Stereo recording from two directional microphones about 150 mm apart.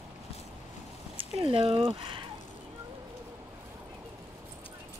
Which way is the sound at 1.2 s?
35° right (ahead or behind).